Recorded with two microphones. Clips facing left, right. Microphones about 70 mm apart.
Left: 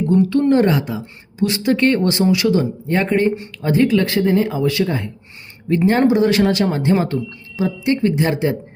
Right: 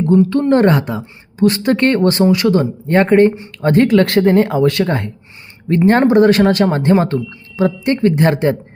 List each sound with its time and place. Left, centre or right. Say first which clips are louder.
0.0 s a woman's voice: right 2 dB; right
5.7 s a woman's voice: right 4 dB; right